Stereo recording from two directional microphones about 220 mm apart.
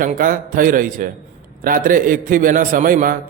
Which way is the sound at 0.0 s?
40° right (ahead or behind).